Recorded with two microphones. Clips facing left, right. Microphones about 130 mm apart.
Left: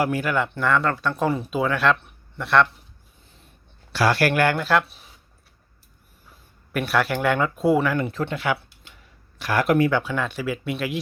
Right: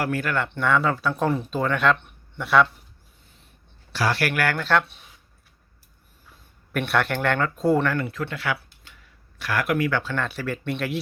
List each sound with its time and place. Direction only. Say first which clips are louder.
0.0 s speech: left 3 dB; 10° left (ahead or behind)
4.4 s speech: left 4 dB; 20° left (ahead or behind)
4.6 s speech: left 1 dB; 5° left (ahead or behind)
6.7 s speech: left 1 dB; centre (ahead or behind)
8.1 s speech: left 3 dB; 20° left (ahead or behind)
9.9 s speech: left 2 dB; 10° left (ahead or behind)